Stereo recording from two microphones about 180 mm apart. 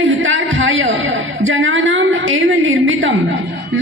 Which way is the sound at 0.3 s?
90° right.